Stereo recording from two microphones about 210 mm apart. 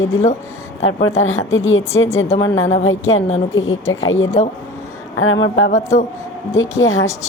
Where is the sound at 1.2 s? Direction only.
75° left (ahead or behind).